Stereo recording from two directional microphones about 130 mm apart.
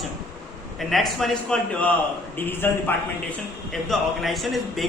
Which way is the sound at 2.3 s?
15° left (ahead or behind).